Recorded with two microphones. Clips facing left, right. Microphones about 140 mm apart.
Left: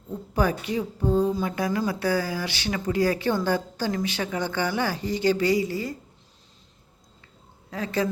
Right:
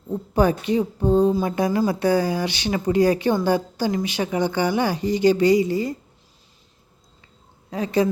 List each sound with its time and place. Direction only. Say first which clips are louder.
0.1 s speech: right 5 dB; 25° right (ahead or behind)
7.7 s speech: right 6 dB; 15° right (ahead or behind)